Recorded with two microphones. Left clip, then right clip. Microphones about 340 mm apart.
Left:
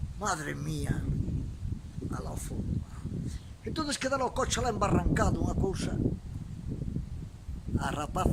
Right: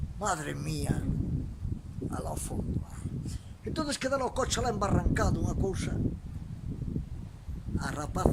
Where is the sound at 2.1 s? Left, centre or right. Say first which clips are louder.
Right 3 dB; centre.